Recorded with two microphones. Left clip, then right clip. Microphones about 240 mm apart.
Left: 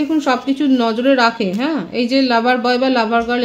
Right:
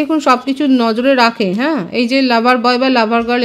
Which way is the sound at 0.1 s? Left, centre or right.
Right.